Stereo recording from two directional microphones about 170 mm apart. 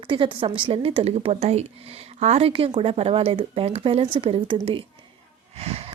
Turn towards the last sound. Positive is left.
turn(degrees=-35)  # may be behind; listen again after turning